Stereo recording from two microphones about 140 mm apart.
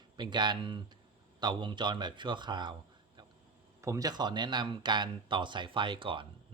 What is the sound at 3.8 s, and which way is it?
Speech, 25° right (ahead or behind).